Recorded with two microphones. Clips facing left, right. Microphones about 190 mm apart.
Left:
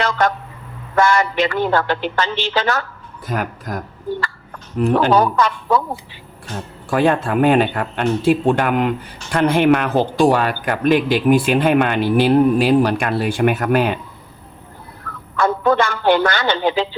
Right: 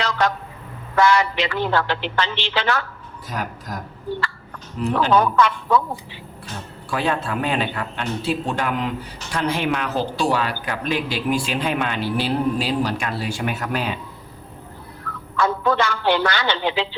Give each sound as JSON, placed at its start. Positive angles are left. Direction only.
{"t": 0.0, "sound": "vehicle", "side_deg": 50}
{"t": 0.9, "sound": "speech", "side_deg": 50}
{"t": 3.2, "sound": "speech", "side_deg": 55}
{"t": 4.8, "sound": "speech", "side_deg": 50}
{"t": 5.1, "sound": "speech", "side_deg": 35}
{"t": 6.9, "sound": "speech", "side_deg": 50}
{"t": 15.1, "sound": "fowl", "side_deg": 50}
{"t": 15.4, "sound": "speech", "side_deg": 50}